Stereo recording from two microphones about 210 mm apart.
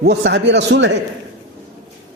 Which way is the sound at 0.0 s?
55° right (ahead or behind).